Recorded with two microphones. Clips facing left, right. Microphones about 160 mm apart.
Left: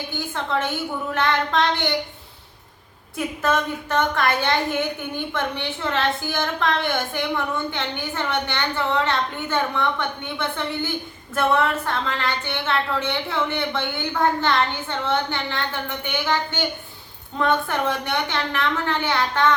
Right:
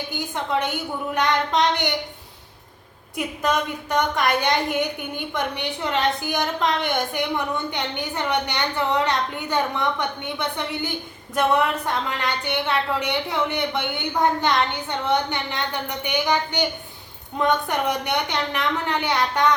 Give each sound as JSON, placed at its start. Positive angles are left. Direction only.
{"t": 1.1, "sound": "a woman's voice", "side_deg": -15}
{"t": 3.2, "sound": "a woman's voice", "side_deg": -15}